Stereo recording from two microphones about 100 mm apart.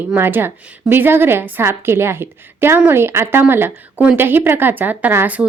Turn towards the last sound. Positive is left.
turn(degrees=-20)  # may be behind; listen again after turning